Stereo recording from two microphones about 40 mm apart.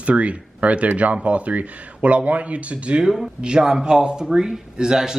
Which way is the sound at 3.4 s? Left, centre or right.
Centre.